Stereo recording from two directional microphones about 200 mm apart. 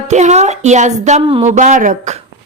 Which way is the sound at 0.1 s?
35° right (ahead or behind).